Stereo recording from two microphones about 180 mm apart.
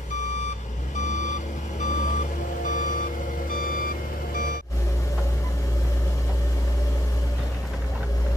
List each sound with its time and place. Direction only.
0.9 s reversing beeps: 40° left (ahead or behind)
3.4 s vehicle: 50° left (ahead or behind)